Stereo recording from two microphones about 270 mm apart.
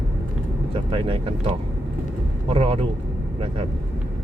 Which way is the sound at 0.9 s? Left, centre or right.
Centre.